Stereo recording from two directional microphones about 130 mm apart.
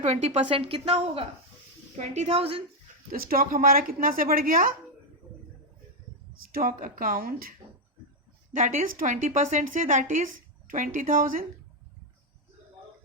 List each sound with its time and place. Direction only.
0.0 s a woman's voice: 55° right (ahead or behind)
3.1 s speech: 90° right
6.7 s speech: 85° right
8.5 s a woman's voice: 85° right